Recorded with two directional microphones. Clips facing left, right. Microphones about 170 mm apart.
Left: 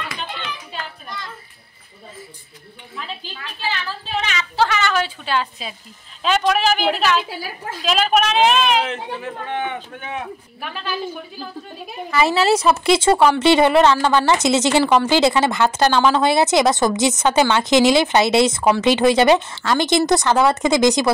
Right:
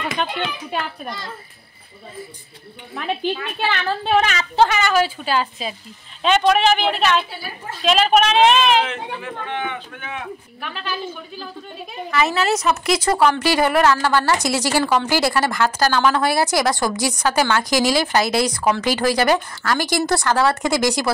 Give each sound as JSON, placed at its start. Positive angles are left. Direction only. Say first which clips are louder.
{"t": 0.2, "sound": "a child's voice", "louder": "right 6 dB", "side_deg": -60}
{"t": 2.9, "sound": "a woman's voice", "louder": "right 10 dB", "side_deg": -60}
{"t": 4.6, "sound": "a woman's voice", "louder": "right 3 dB", "side_deg": -15}
{"t": 7.2, "sound": "a woman's voice", "louder": "left 3 dB", "side_deg": 90}
{"t": 7.8, "sound": "a woman's voice", "louder": "right 2 dB", "side_deg": 0}
{"t": 8.8, "sound": "a man's voice", "louder": "left 1 dB", "side_deg": 35}
{"t": 12.1, "sound": "a woman's voice", "louder": "left 3 dB", "side_deg": 30}